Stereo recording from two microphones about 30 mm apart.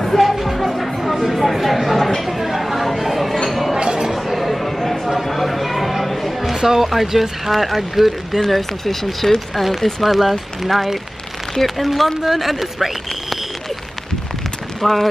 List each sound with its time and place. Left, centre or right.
0.0 s music: centre
2.2 s chatter: centre
3.4 s a sound: centre
3.8 s a sound: right
4.1 s a sound: centre
5.2 s chatter: centre
6.5 s speech: centre
6.9 s speech: centre
8.5 s speech: centre
14.8 s speech: centre